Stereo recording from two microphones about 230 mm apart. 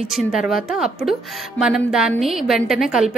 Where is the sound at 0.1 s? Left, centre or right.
Centre.